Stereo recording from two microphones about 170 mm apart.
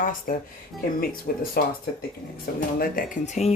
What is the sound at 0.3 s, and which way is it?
Speech, 55° left (ahead or behind).